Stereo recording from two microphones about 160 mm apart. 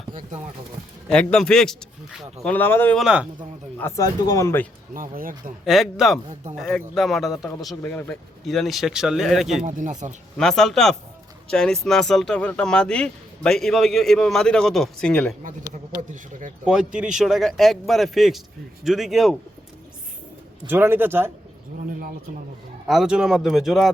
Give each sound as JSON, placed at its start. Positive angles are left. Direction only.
{"t": 1.0, "sound": "speech", "side_deg": 5}
{"t": 3.0, "sound": "speech", "side_deg": -5}
{"t": 3.8, "sound": "speech", "side_deg": 20}
{"t": 4.9, "sound": "speech", "side_deg": -60}
{"t": 5.6, "sound": "speech", "side_deg": 0}
{"t": 9.6, "sound": "speech", "side_deg": -50}
{"t": 10.3, "sound": "speech", "side_deg": 5}
{"t": 16.6, "sound": "speech", "side_deg": -5}
{"t": 20.7, "sound": "a man's voice", "side_deg": -15}
{"t": 22.9, "sound": "speech", "side_deg": -5}